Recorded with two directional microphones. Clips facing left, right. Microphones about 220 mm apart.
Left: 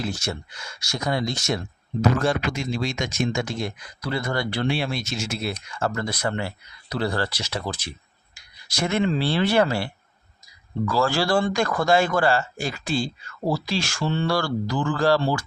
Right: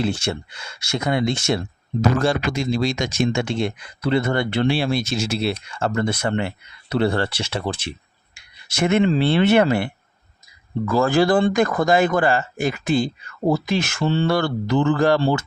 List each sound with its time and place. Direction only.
0.0 s speech: 30° right (ahead or behind)
14.0 s speech: 30° right (ahead or behind)